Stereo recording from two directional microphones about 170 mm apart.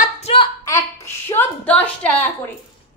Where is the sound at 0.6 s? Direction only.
15° left (ahead or behind).